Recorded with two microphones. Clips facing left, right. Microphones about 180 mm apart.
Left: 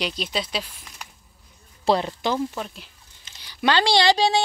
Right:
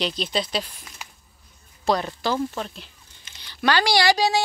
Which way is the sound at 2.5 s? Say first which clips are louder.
Right 1 dB; 5° left (ahead or behind).